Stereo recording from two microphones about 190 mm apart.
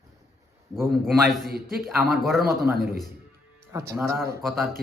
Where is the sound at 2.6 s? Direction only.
55° right (ahead or behind).